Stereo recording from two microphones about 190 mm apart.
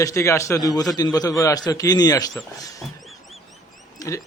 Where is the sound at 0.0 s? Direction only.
15° left (ahead or behind).